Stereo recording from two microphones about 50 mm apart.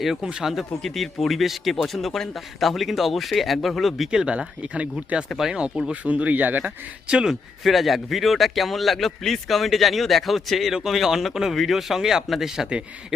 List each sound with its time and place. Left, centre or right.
0.0 s speech: centre
0.8 s speech: centre
4.2 s speech: right
7.3 s speech: centre